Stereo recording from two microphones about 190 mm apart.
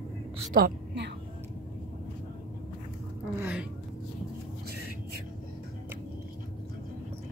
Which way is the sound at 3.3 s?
10° right (ahead or behind).